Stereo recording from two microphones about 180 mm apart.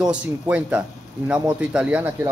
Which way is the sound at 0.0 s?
5° right (ahead or behind).